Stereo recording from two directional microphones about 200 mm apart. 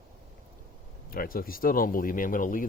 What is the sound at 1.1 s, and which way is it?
Speech, 45° left (ahead or behind).